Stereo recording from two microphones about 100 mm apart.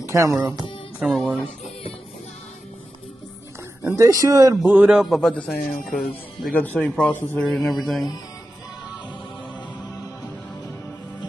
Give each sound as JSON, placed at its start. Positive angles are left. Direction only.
{"t": 0.0, "sound": "speech", "side_deg": -30}
{"t": 1.0, "sound": "speech", "side_deg": 5}
{"t": 3.8, "sound": "speech", "side_deg": -30}
{"t": 4.6, "sound": "a man's voice", "side_deg": -10}
{"t": 5.1, "sound": "speech", "side_deg": 5}
{"t": 6.5, "sound": "a man's voice", "side_deg": 15}
{"t": 7.4, "sound": "speech", "side_deg": 0}